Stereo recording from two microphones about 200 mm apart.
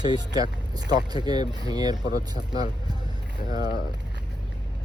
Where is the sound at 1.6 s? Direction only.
20° right (ahead or behind).